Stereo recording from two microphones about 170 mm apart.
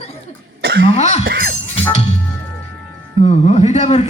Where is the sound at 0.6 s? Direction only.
80° right.